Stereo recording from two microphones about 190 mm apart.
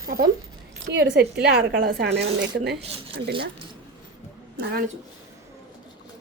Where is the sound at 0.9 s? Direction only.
60° right (ahead or behind).